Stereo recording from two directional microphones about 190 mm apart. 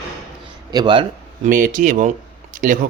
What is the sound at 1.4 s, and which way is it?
Speech, 45° right (ahead or behind).